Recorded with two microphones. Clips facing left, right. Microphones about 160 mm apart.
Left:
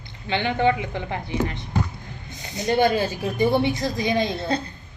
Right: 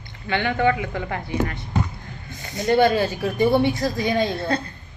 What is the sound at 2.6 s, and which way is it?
Speech, 20° left (ahead or behind).